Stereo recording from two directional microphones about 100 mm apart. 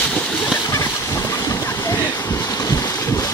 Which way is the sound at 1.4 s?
35° left (ahead or behind).